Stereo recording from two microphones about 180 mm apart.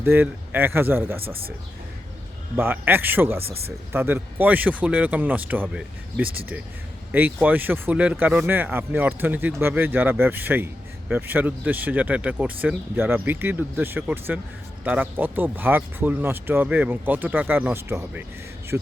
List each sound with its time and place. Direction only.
0.0 s speech: 10° right (ahead or behind)
1.2 s speech: 30° right (ahead or behind)
2.6 s speech: 10° right (ahead or behind)